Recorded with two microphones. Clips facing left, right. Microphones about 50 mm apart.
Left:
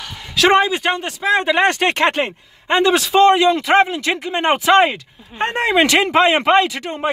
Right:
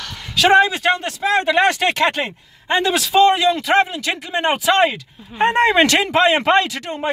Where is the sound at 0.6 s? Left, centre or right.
Centre.